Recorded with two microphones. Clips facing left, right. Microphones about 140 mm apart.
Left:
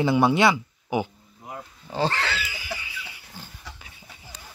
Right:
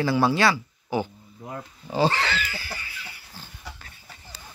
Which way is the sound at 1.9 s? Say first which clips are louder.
Right 3 dB; 5° right (ahead or behind).